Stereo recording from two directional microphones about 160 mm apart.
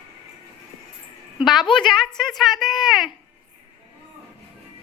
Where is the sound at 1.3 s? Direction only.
Centre (ahead or behind).